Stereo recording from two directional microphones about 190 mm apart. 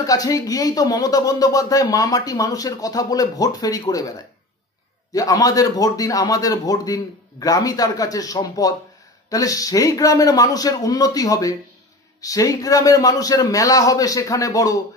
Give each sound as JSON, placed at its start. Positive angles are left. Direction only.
{"t": 0.0, "sound": "speech", "side_deg": 20}
{"t": 5.1, "sound": "a man's voice", "side_deg": 20}